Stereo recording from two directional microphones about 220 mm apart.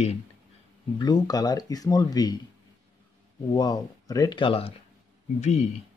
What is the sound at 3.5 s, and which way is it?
Speech, 15° left (ahead or behind).